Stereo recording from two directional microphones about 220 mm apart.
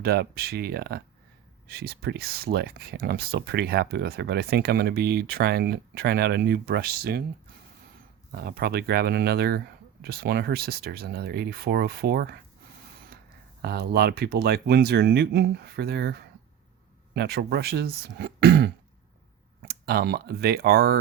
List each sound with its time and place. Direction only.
0.0 s speech: 45° right (ahead or behind)
8.4 s speech: 45° right (ahead or behind)
13.6 s speech: 45° right (ahead or behind)